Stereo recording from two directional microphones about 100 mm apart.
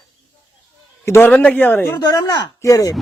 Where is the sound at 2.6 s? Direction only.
35° left (ahead or behind).